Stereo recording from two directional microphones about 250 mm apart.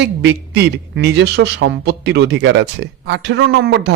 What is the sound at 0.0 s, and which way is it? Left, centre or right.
Speech, right.